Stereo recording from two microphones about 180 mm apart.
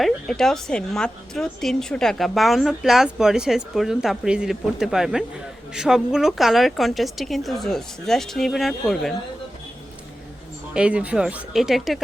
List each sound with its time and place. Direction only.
0.0 s a woman's voice: centre (ahead or behind)
10.8 s a woman's voice: 5° right (ahead or behind)